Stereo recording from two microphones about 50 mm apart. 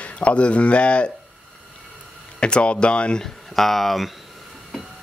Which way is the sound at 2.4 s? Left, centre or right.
Left.